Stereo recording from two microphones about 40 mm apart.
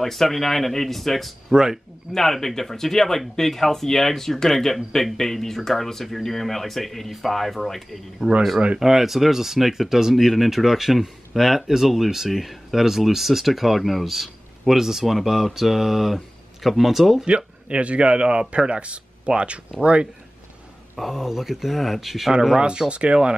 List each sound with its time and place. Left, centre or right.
0.0 s speech: centre
1.5 s speech: centre
2.1 s speech: centre
8.7 s speech: centre
17.2 s a man's voice: right
20.9 s speech: centre
22.6 s a man's voice: right